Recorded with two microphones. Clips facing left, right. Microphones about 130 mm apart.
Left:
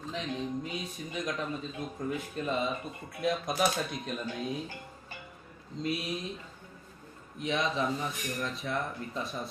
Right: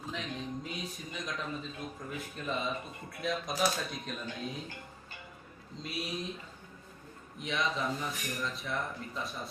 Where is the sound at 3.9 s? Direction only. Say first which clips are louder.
Left 4 dB; centre (ahead or behind).